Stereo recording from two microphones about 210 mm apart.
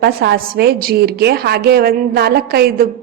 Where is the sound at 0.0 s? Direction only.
50° right (ahead or behind).